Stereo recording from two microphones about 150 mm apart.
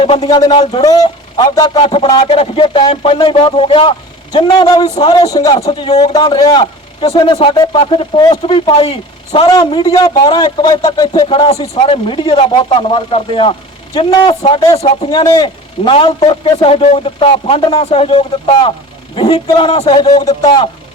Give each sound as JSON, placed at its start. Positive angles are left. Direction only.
{"t": 0.0, "sound": "speech", "side_deg": 40}
{"t": 1.4, "sound": "a man's voice", "side_deg": 30}
{"t": 5.5, "sound": "speech", "side_deg": 45}
{"t": 6.1, "sound": "a man's voice", "side_deg": 30}